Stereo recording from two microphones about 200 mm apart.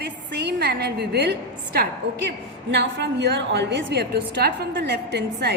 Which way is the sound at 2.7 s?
60° right (ahead or behind).